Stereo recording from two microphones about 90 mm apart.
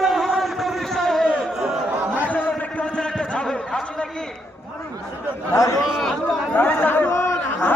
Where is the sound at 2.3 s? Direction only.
15° left (ahead or behind).